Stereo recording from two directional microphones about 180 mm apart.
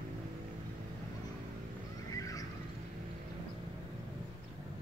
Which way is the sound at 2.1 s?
20° left (ahead or behind).